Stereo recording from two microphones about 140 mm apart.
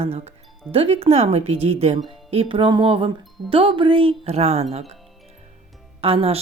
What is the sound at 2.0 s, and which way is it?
Music, 40° right (ahead or behind).